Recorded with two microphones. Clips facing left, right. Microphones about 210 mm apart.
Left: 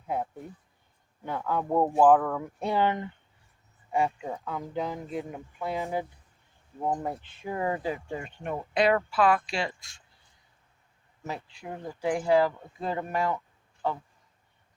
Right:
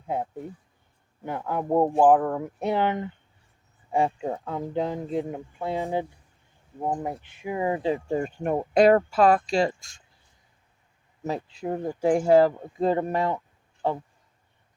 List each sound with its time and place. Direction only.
1.2 s speech: 20° right (ahead or behind)
3.9 s speech: 30° right (ahead or behind)
6.7 s speech: 15° right (ahead or behind)
8.0 s speech: 40° right (ahead or behind)
11.2 s speech: 35° right (ahead or behind)